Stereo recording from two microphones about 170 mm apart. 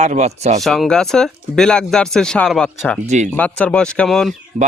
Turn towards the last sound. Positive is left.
turn(degrees=0)  # may be behind; listen again after turning